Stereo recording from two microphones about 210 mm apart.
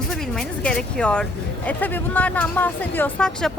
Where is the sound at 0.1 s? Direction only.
5° left (ahead or behind).